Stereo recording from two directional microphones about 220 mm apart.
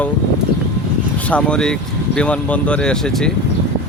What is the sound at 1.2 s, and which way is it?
Speech, 5° left (ahead or behind).